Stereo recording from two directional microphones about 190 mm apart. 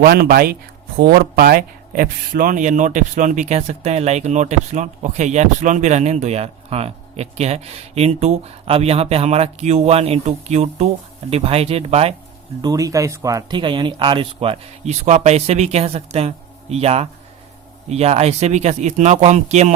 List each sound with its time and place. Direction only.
0.0 s a man's voice: 55° right (ahead or behind); by 12.1 s 30° right (ahead or behind)
12.6 s a man's voice: 15° right (ahead or behind); by 19.7 s 35° right (ahead or behind)